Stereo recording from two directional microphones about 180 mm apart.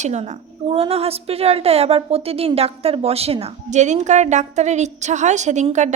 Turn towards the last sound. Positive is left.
turn(degrees=-40)  # may be behind; listen again after turning